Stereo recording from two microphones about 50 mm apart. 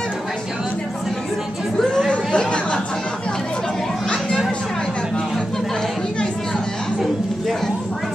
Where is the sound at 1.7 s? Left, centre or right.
Centre.